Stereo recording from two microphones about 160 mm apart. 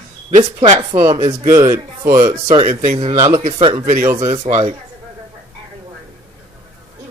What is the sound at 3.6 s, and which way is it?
Speech, 30° right (ahead or behind).